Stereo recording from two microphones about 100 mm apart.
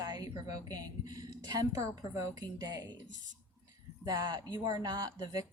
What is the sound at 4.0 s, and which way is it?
A woman's voice, 45° right (ahead or behind).